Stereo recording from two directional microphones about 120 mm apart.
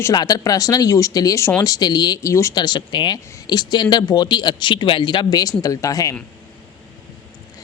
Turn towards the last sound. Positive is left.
turn(degrees=30)  # may be behind; listen again after turning